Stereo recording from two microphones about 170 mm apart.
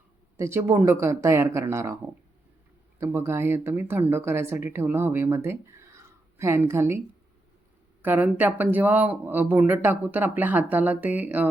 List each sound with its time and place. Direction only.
0.3 s speech: 15° right (ahead or behind)
8.0 s speech: 10° right (ahead or behind)